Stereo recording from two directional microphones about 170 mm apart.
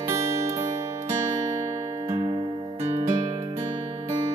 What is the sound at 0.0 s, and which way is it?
Music, 15° right (ahead or behind).